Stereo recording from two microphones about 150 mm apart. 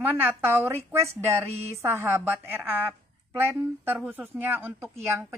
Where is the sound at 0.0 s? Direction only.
15° right (ahead or behind).